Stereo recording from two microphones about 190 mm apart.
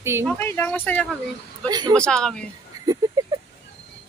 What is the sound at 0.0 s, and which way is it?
Speech, 15° right (ahead or behind).